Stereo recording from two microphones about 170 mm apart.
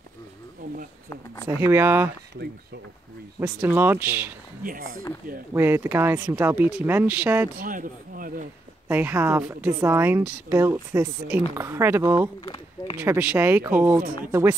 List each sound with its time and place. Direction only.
1.6 s a woman's voice: 15° right (ahead or behind)
3.3 s a woman's voice: 10° right (ahead or behind)
5.5 s a woman's voice: 15° right (ahead or behind)
7.5 s speech: 55° right (ahead or behind)
8.8 s a woman's voice: 10° right (ahead or behind)
12.4 s speech: 30° left (ahead or behind)
13.0 s a woman's voice: 10° right (ahead or behind)